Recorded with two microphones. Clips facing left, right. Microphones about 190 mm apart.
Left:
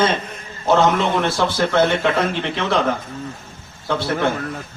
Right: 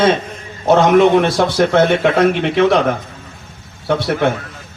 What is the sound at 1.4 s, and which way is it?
Speech, 60° right (ahead or behind).